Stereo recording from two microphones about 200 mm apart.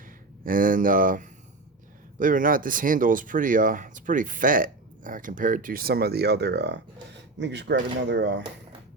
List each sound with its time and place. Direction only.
0.4 s speech: 45° right (ahead or behind); by 8.4 s 60° right (ahead or behind)